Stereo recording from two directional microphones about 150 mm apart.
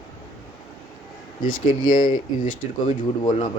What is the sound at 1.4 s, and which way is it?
Speech, 65° left (ahead or behind).